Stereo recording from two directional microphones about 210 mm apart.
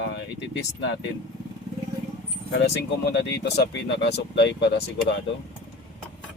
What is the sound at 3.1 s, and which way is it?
Speech, 55° left (ahead or behind).